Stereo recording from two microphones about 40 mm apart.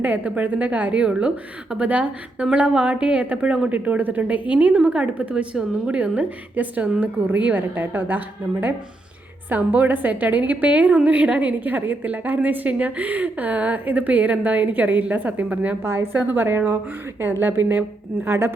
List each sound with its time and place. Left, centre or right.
0.0 s a woman's voice: right
3.7 s a woman's voice: right
5.3 s a woman's voice: right
9.5 s a woman's voice: right
11.6 s a woman's voice: right
15.8 s a woman's voice: right
16.1 s a woman's voice: right
18.3 s a woman's voice: right